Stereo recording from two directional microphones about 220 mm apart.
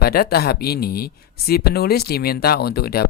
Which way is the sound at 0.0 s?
45° left (ahead or behind).